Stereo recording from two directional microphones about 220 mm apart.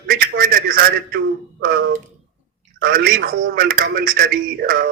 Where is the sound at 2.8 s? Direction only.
45° right (ahead or behind).